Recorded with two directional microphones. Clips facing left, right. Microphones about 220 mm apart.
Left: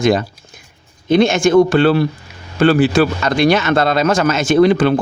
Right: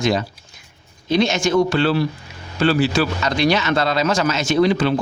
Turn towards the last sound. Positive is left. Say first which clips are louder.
# left 5 dB
turn(degrees=55)  # may be behind; listen again after turning